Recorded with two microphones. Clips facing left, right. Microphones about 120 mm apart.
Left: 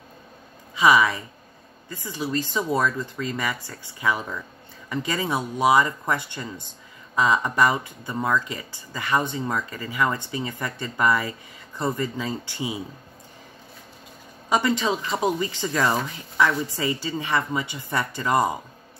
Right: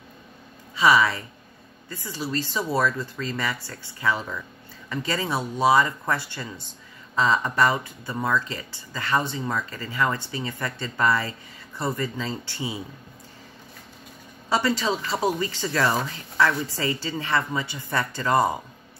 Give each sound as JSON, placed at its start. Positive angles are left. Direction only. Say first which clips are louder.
{"t": 0.7, "sound": "speech", "louder": "left 1 dB", "side_deg": 15}
{"t": 14.5, "sound": "speech", "louder": "left 1 dB", "side_deg": 20}